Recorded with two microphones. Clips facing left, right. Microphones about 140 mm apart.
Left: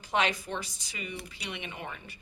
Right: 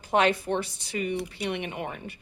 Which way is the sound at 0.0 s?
55° right (ahead or behind).